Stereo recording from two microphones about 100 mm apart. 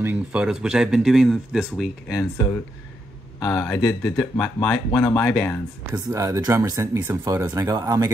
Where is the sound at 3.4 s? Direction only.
10° left (ahead or behind).